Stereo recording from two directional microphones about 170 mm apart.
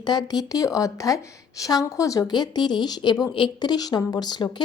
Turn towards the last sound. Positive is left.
turn(degrees=25)  # may be behind; listen again after turning